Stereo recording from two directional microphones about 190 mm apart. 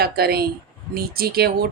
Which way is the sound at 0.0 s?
55° right (ahead or behind).